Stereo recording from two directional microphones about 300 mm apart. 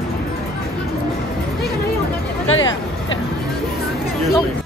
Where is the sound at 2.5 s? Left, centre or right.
Left.